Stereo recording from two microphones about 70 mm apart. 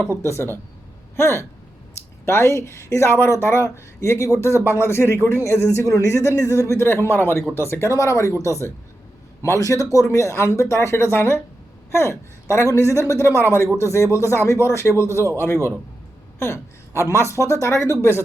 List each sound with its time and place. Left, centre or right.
0.1 s speech: left
5.7 s a woman's voice: left
16.4 s a woman's voice: left